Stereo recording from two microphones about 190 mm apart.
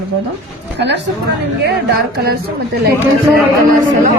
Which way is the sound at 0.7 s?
65° right (ahead or behind).